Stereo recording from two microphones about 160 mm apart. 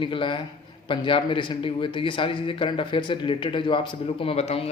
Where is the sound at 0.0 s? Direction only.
30° left (ahead or behind).